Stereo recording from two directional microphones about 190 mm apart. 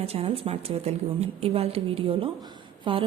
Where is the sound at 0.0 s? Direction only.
30° right (ahead or behind).